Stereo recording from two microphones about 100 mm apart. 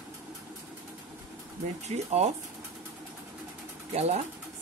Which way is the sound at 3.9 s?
90° right.